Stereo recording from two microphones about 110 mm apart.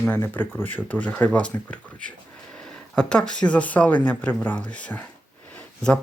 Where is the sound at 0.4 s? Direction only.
20° left (ahead or behind).